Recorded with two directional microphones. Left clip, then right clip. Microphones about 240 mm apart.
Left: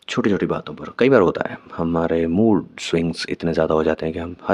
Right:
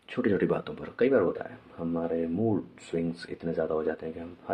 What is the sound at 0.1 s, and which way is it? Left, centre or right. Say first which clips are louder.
Speech: left 6 dB; left.